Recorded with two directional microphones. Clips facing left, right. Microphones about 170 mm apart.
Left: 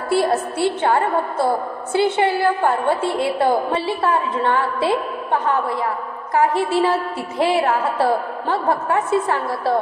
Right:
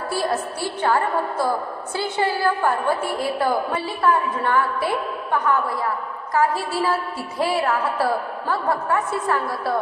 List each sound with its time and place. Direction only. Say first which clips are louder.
0.1 s a woman's voice: left 7 dB; 25° left (ahead or behind)